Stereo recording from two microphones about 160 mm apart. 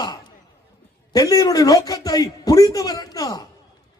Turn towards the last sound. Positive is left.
turn(degrees=25)  # may be behind; listen again after turning